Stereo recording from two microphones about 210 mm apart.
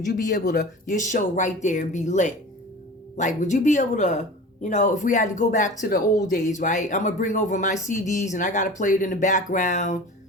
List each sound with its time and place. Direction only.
0.2 s speech: 40° left (ahead or behind)